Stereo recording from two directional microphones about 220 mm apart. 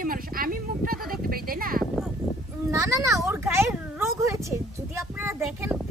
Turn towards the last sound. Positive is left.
turn(degrees=-10)  # may be behind; listen again after turning